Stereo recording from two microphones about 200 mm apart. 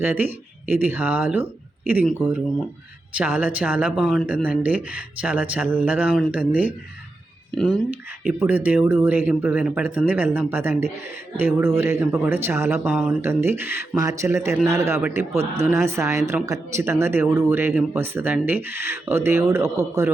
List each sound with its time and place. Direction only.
0.0 s speech: 10° right (ahead or behind)
12.9 s speech: centre (ahead or behind)